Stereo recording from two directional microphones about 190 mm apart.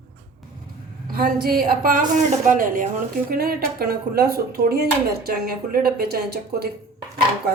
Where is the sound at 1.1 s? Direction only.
50° right (ahead or behind).